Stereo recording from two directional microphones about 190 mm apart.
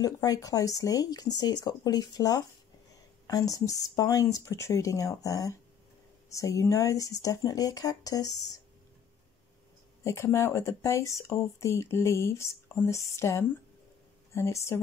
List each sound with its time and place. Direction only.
0.0 s speech: 20° left (ahead or behind)
10.0 s speech: 15° left (ahead or behind)